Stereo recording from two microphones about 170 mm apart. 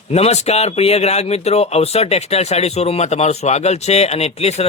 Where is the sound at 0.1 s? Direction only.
40° left (ahead or behind).